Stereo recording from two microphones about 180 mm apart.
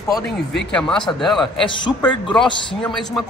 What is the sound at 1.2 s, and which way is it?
Speech, centre (ahead or behind).